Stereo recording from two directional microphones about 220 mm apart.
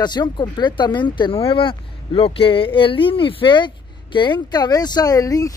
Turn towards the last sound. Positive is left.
turn(degrees=15)  # may be behind; listen again after turning